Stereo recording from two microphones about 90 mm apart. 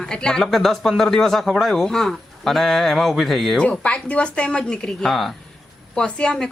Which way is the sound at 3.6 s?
15° left (ahead or behind).